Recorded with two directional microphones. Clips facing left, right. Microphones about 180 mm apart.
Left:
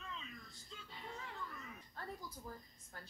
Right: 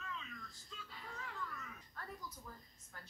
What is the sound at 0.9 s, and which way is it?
A woman's voice, 25° left (ahead or behind).